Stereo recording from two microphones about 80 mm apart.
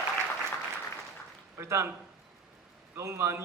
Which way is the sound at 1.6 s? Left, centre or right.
Right.